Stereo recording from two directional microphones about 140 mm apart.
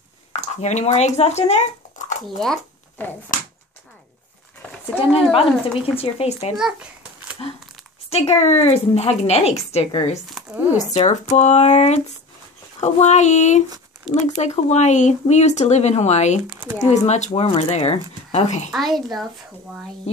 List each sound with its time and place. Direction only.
0.3 s speech: 55° left (ahead or behind)
2.2 s a child's voice: 5° left (ahead or behind)
3.3 s finger snapping: 70° left (ahead or behind)
5.3 s speech: 45° left (ahead or behind)
6.5 s a sound: 5° right (ahead or behind)
8.1 s speech: 50° left (ahead or behind)
10.3 s speech: 5° right (ahead or behind)
10.9 s speech: 55° left (ahead or behind)
12.8 s a sound: 55° left (ahead or behind)
14.1 s speech: 55° left (ahead or behind)
16.4 s speech: 10° right (ahead or behind)
16.9 s speech: 55° left (ahead or behind)
18.7 s a child's voice: centre (ahead or behind)